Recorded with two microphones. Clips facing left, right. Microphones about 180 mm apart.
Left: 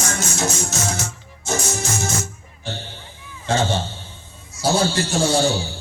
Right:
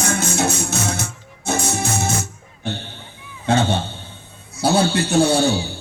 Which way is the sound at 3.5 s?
60° right (ahead or behind).